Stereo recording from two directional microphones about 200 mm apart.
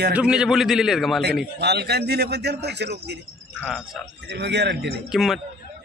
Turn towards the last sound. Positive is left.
turn(degrees=0)  # may be behind; listen again after turning